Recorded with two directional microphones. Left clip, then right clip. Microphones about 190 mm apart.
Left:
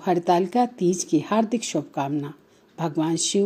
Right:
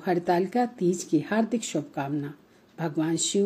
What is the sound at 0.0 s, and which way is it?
Speech, 25° left (ahead or behind).